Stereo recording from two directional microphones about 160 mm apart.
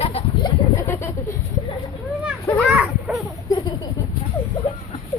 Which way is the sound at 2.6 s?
5° right (ahead or behind).